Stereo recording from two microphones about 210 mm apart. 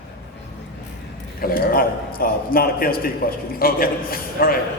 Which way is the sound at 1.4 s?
45° left (ahead or behind).